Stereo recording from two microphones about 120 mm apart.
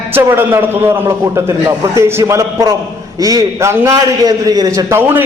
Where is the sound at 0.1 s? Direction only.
20° right (ahead or behind).